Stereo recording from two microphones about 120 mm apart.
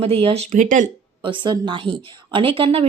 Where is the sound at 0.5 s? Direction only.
90° right.